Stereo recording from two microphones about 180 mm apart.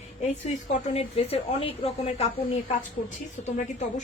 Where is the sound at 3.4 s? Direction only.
40° left (ahead or behind).